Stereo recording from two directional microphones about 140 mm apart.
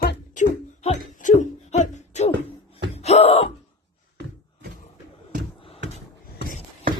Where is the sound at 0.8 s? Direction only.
55° left (ahead or behind).